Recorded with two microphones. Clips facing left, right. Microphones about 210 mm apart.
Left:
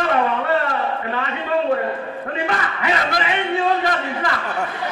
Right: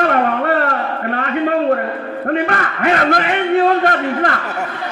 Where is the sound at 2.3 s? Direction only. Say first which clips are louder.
Right 7 dB; 60° right (ahead or behind).